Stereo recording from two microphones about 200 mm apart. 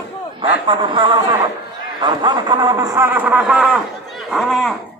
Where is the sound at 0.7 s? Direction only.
25° right (ahead or behind).